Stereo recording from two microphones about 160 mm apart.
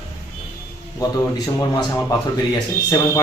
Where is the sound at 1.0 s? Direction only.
25° left (ahead or behind).